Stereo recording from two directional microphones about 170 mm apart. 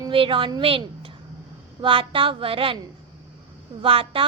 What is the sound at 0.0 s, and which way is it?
A woman's voice, 30° right (ahead or behind).